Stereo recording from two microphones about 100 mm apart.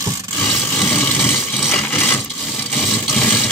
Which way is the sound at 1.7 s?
20° left (ahead or behind).